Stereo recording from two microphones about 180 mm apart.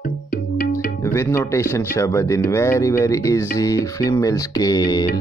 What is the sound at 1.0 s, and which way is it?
Speech, 15° left (ahead or behind).